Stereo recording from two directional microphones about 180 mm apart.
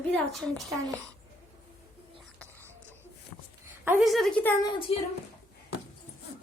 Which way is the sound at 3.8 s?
10° right (ahead or behind).